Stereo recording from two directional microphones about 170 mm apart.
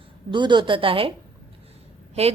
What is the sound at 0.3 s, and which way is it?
Speech, 25° right (ahead or behind).